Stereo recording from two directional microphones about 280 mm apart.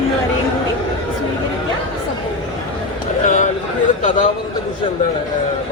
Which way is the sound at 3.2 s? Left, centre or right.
Left.